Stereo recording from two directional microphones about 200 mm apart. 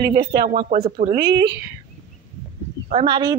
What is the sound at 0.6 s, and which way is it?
Speech, 35° right (ahead or behind).